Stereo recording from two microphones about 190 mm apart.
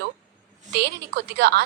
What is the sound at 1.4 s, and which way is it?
Speech, 60° right (ahead or behind).